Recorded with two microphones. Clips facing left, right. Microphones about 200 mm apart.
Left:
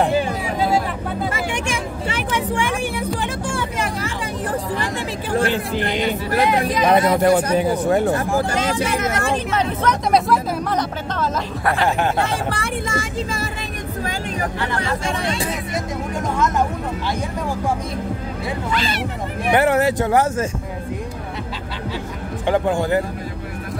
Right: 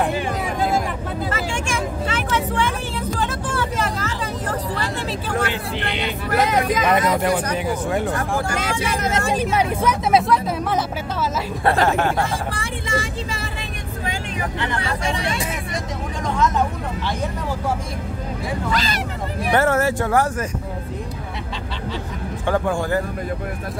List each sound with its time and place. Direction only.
2.1 s vehicle: 15° left (ahead or behind)
5.4 s a sound: 40° left (ahead or behind)
6.3 s speech: 45° right (ahead or behind)
6.8 s speech: 35° left (ahead or behind)
9.4 s speech: 10° right (ahead or behind)
11.6 s speech: 40° right (ahead or behind)
12.3 s speech: 65° left (ahead or behind)
12.8 s speech: 45° left (ahead or behind)
18.7 s speech: 40° right (ahead or behind)
19.5 s speech: 15° left (ahead or behind)
22.5 s speech: 20° left (ahead or behind)